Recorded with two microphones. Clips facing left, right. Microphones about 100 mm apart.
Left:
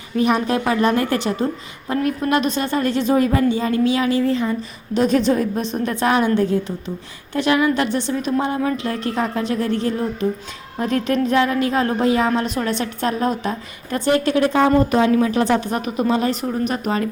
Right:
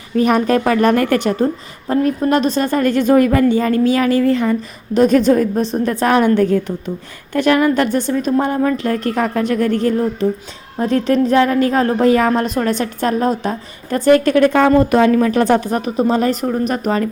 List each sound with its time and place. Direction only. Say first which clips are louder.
0.2 s a woman's voice: right 4 dB; 50° right (ahead or behind)
1.9 s a woman's voice: right 4 dB; 35° right (ahead or behind); by 4.5 s 60° right (ahead or behind)
4.9 s a woman's voice: right 5 dB; 45° right (ahead or behind)
10.8 s a woman's voice: right 5 dB; 35° right (ahead or behind); by 12.3 s 50° right (ahead or behind)
12.3 s a woman's voice: right 4 dB; 40° right (ahead or behind)
14.6 s a woman's voice: right 4 dB; 65° right (ahead or behind); by 17.1 s 40° right (ahead or behind)